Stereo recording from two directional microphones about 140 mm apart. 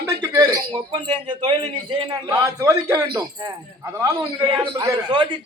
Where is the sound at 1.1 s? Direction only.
40° right (ahead or behind).